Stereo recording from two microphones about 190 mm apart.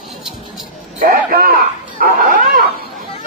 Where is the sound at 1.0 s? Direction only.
50° right (ahead or behind).